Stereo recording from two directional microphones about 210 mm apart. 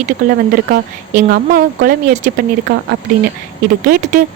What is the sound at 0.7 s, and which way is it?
Speech, 45° right (ahead or behind).